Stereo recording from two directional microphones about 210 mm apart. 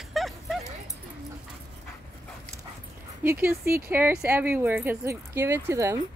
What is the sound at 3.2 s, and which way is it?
Speech, 10° right (ahead or behind).